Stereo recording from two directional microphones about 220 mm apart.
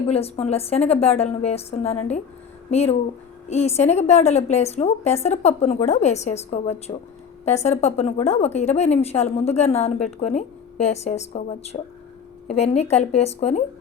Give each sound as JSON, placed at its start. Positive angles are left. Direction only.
{"t": 0.1, "sound": "a woman's voice", "side_deg": 25}